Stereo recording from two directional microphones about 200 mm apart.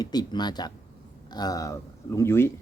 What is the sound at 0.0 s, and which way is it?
Speech, 20° left (ahead or behind).